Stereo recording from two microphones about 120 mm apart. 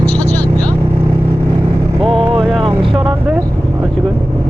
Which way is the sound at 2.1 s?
50° right (ahead or behind).